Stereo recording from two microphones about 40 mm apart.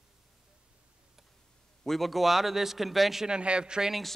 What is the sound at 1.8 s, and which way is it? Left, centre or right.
Speech, centre.